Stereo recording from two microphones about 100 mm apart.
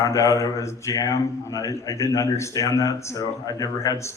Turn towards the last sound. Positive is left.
turn(degrees=30)  # may be behind; listen again after turning